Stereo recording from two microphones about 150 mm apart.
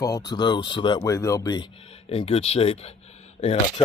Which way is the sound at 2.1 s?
40° left (ahead or behind).